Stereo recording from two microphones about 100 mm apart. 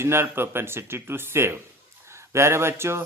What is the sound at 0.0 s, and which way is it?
Speech, 25° right (ahead or behind).